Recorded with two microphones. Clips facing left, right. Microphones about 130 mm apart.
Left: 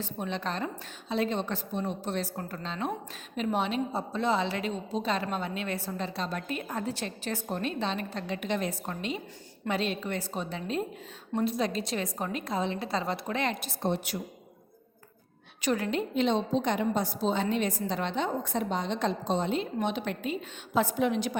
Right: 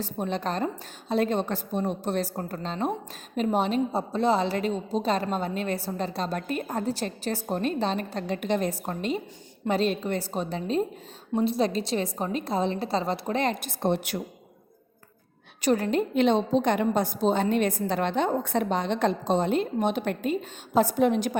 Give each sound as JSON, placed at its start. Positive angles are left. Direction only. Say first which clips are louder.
{"t": 0.0, "sound": "a woman's voice", "louder": "right 4 dB", "side_deg": -40}
{"t": 13.7, "sound": "a woman's voice", "louder": "right 4 dB", "side_deg": -60}
{"t": 15.6, "sound": "a woman's voice", "louder": "right 5 dB", "side_deg": -40}
{"t": 16.1, "sound": "a woman's voice", "louder": "right 4 dB", "side_deg": -60}